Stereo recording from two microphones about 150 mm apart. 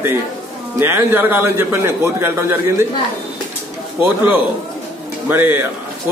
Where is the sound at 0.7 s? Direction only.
15° right (ahead or behind).